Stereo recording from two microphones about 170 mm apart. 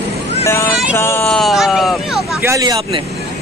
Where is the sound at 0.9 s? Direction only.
15° left (ahead or behind).